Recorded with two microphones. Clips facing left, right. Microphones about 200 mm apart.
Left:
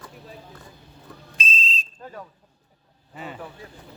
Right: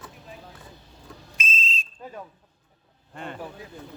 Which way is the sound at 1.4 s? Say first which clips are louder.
Left 2 dB; 35° left (ahead or behind).